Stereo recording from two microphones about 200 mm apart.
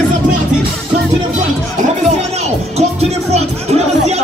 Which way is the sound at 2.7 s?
30° right (ahead or behind).